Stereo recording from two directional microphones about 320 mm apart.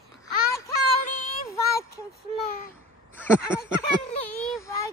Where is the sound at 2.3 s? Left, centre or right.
Centre.